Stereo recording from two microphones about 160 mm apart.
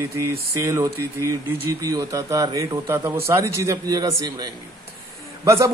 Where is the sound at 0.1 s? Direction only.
20° right (ahead or behind).